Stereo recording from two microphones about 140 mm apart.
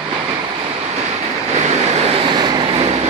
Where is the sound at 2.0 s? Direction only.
40° right (ahead or behind).